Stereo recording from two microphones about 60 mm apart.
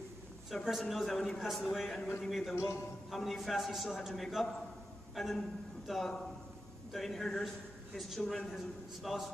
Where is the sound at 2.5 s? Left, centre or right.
Left.